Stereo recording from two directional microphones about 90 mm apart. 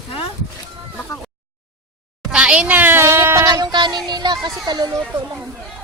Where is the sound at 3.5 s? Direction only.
50° right (ahead or behind).